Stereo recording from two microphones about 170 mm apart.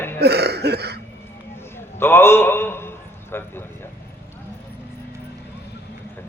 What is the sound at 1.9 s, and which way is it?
A man's voice, 15° left (ahead or behind).